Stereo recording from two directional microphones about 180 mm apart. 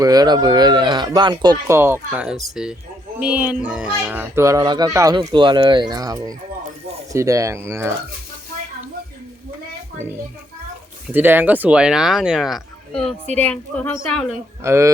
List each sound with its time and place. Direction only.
0.0 s speech: 20° right (ahead or behind)
11.1 s a woman's voice: 10° right (ahead or behind)
14.6 s speech: 15° right (ahead or behind)